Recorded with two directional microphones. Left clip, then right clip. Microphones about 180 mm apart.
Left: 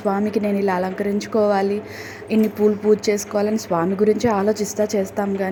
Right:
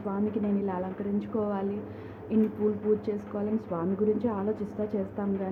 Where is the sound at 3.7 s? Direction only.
50° left (ahead or behind).